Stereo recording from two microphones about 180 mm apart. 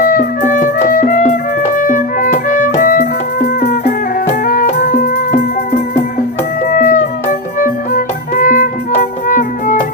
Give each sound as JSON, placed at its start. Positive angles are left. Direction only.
{"t": 0.0, "sound": "music", "side_deg": 50}